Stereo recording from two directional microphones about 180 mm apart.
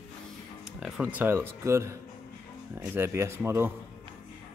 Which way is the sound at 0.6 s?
5° right (ahead or behind).